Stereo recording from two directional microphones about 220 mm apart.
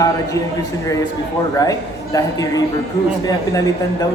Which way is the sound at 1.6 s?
15° left (ahead or behind).